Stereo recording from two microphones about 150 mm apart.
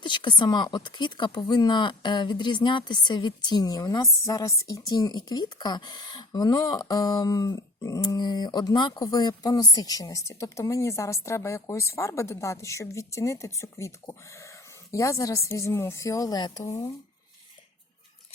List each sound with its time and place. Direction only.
0.0 s speech: 30° left (ahead or behind)